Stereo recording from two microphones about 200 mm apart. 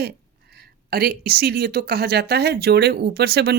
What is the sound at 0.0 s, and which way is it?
Speech, 50° right (ahead or behind).